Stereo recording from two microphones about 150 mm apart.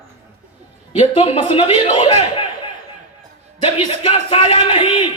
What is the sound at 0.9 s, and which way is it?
A man's voice, 40° left (ahead or behind).